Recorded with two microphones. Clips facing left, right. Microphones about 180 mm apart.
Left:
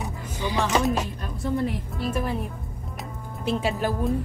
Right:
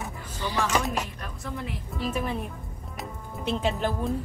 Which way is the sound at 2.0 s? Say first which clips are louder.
Even; centre (ahead or behind).